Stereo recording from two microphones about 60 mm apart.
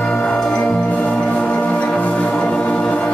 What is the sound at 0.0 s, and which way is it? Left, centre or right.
Music, centre.